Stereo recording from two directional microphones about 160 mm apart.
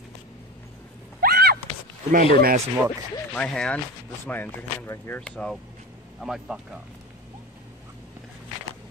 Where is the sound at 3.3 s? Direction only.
5° left (ahead or behind).